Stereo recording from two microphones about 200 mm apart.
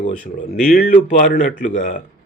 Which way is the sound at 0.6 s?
45° left (ahead or behind).